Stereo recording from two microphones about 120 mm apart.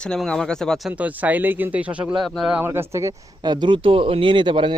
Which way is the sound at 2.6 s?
20° right (ahead or behind).